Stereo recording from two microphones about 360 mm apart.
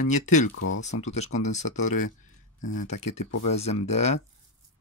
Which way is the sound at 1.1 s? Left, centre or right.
Centre.